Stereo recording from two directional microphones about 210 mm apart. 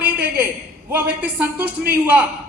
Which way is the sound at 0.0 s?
5° right (ahead or behind).